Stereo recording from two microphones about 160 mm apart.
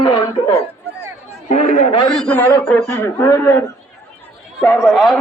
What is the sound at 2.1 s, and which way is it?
A man's voice, 5° left (ahead or behind).